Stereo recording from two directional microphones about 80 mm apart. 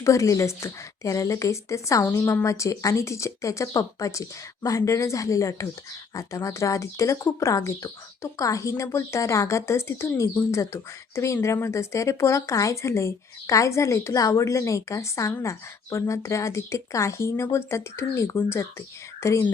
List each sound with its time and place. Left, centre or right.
0.0 s speech: left